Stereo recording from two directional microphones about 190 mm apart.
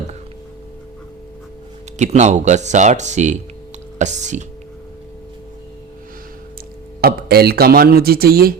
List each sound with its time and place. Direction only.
2.0 s speech: 35° right (ahead or behind)
7.0 s speech: 55° right (ahead or behind)